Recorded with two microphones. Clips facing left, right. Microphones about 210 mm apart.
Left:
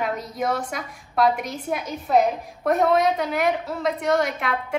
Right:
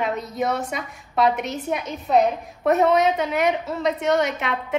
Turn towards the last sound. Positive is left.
turn(degrees=0)  # may be behind; listen again after turning